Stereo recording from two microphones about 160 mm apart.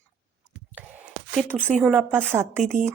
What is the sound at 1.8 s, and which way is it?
Speech, 10° right (ahead or behind).